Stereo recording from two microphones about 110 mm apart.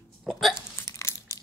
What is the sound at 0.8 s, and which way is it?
Crunch, 25° left (ahead or behind).